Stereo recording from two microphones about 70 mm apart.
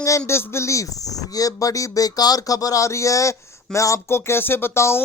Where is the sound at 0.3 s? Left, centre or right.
Left.